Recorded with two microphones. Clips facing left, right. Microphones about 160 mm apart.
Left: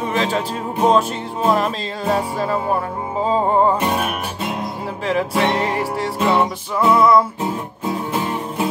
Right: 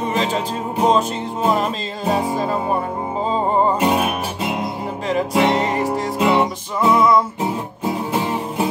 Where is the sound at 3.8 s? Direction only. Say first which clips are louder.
Right 3 dB; 20° right (ahead or behind).